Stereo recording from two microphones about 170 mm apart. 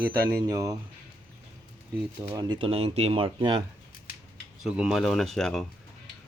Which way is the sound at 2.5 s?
30° right (ahead or behind).